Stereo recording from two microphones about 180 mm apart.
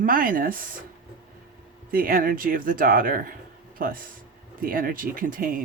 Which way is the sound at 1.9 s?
50° right (ahead or behind).